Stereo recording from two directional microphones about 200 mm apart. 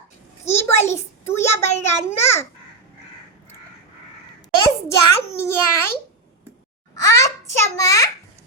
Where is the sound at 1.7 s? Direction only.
30° left (ahead or behind).